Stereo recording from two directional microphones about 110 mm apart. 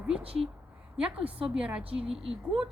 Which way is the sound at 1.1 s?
60° right (ahead or behind).